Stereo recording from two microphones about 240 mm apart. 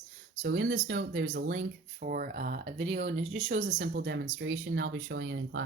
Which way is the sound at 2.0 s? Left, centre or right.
Right.